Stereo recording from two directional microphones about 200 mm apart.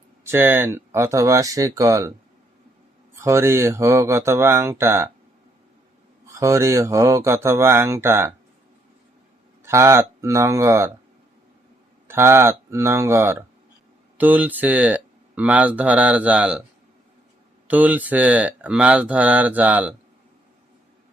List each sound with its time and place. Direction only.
0.3 s speech: 10° right (ahead or behind)
3.2 s speech: 15° right (ahead or behind)
6.2 s speech: 15° right (ahead or behind)
9.6 s speech: 15° right (ahead or behind)
12.0 s speech: 10° right (ahead or behind)
17.7 s speech: 10° right (ahead or behind)